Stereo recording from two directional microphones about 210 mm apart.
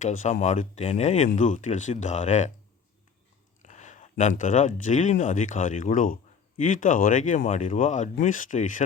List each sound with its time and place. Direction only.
0.0 s speech: 35° left (ahead or behind)
3.6 s speech: 35° left (ahead or behind)